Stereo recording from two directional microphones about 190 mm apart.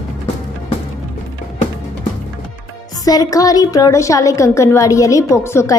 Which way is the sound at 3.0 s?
20° left (ahead or behind).